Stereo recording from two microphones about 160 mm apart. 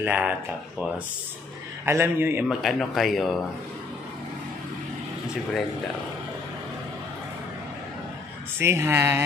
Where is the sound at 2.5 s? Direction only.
Centre (ahead or behind).